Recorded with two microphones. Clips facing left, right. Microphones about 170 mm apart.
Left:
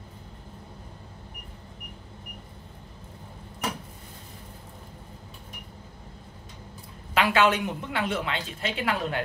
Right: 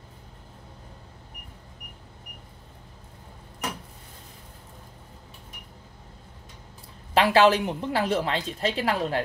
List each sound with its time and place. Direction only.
7.2 s a woman's voice: 35° right (ahead or behind)